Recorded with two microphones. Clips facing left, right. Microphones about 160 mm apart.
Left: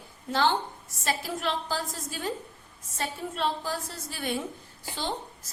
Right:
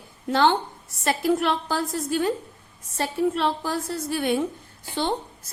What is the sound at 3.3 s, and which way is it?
A woman's voice, 75° right (ahead or behind).